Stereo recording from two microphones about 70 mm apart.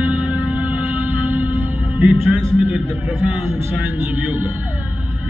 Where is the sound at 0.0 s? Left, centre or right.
Right.